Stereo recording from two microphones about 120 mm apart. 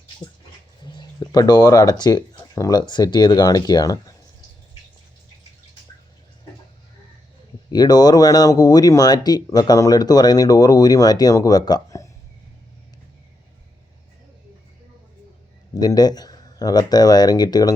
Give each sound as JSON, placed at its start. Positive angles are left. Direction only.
{"t": 0.9, "sound": "speech", "side_deg": 35}
{"t": 7.7, "sound": "speech", "side_deg": 35}
{"t": 15.7, "sound": "speech", "side_deg": 35}